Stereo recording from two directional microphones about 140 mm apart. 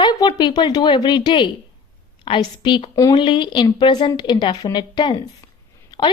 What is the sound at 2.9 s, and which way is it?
Speech, 25° left (ahead or behind).